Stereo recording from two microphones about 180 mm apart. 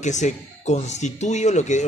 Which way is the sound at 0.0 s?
40° left (ahead or behind).